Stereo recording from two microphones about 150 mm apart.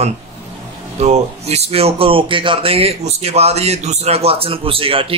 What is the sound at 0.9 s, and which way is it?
Speech, 45° right (ahead or behind).